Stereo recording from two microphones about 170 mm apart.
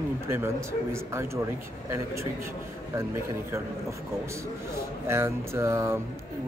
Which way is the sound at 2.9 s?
15° right (ahead or behind).